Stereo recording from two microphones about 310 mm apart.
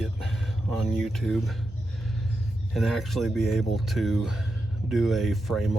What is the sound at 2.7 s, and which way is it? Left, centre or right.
Speech, centre.